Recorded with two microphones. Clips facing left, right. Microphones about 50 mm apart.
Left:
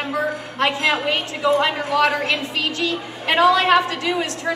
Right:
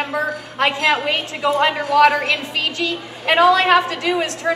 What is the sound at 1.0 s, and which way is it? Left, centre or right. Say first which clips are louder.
Speech: even; centre.